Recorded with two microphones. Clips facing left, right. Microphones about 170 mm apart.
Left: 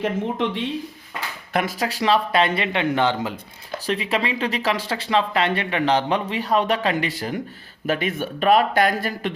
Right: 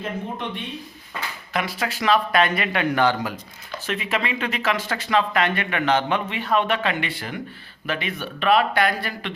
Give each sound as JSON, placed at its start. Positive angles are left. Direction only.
{"t": 0.0, "sound": "speech", "side_deg": 90}
{"t": 1.5, "sound": "speech", "side_deg": 45}